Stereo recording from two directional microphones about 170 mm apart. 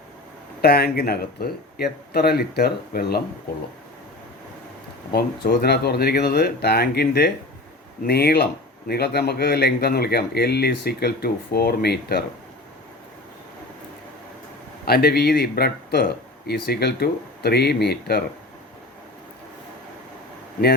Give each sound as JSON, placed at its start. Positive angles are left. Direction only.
{"t": 0.6, "sound": "speech", "side_deg": 65}
{"t": 5.1, "sound": "speech", "side_deg": 65}
{"t": 14.8, "sound": "speech", "side_deg": 65}